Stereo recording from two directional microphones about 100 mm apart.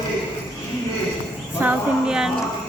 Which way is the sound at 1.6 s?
10° right (ahead or behind).